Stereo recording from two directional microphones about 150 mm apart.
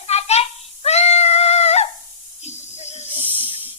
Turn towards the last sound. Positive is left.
turn(degrees=-10)  # may be behind; listen again after turning